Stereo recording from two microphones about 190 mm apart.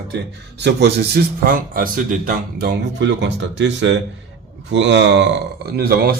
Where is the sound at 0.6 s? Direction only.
65° right (ahead or behind).